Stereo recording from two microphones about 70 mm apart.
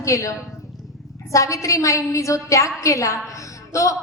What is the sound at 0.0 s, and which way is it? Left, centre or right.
A woman's voice, left.